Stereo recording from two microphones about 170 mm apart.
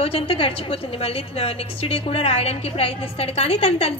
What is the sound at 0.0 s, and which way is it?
A woman's voice, 35° left (ahead or behind).